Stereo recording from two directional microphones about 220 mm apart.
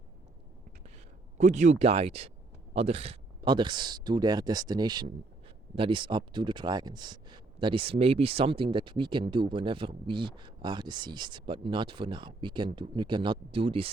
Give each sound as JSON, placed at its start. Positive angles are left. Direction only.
{"t": 1.4, "sound": "speech", "side_deg": -35}